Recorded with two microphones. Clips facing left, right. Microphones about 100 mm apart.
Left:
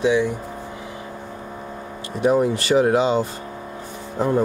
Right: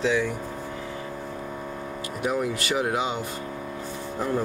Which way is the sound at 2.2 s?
30° left (ahead or behind).